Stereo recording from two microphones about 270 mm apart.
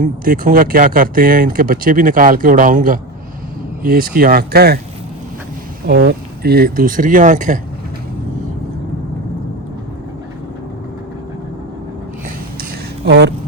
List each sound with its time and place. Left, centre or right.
0.0 s speech: right
5.8 s speech: right
13.1 s speech: right